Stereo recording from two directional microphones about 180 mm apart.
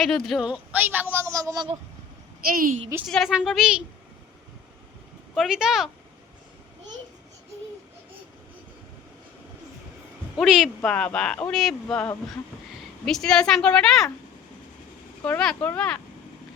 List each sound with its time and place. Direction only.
0.0 s a man's voice: centre (ahead or behind); by 1.7 s 20° right (ahead or behind)
2.5 s a woman's voice: 50° right (ahead or behind)
3.1 s speech: centre (ahead or behind)
5.3 s speech: centre (ahead or behind)
10.3 s speech: 5° right (ahead or behind)
15.2 s speech: 5° left (ahead or behind)